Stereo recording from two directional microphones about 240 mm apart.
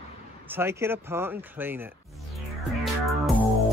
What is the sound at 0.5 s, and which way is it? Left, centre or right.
Speech, centre.